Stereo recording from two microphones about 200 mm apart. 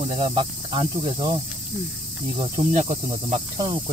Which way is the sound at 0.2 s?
25° right (ahead or behind).